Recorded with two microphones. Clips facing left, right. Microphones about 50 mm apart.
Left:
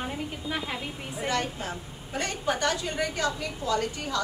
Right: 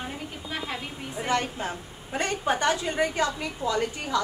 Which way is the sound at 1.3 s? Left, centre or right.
Right.